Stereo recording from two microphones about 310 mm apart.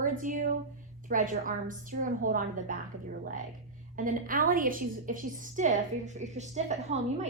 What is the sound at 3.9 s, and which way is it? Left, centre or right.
A woman's voice, right.